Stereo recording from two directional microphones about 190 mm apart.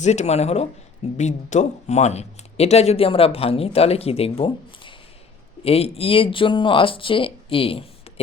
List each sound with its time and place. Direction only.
0.0 s speech: 35° left (ahead or behind)